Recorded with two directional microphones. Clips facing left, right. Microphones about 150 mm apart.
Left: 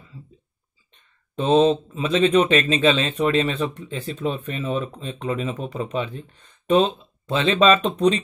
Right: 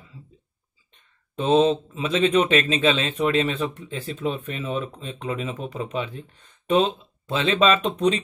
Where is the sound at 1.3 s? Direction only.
5° right (ahead or behind).